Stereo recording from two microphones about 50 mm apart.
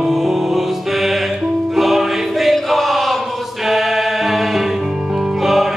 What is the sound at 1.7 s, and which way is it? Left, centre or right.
Choir, centre.